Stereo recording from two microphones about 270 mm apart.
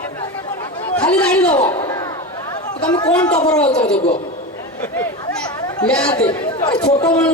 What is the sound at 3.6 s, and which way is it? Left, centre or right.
Speech, centre.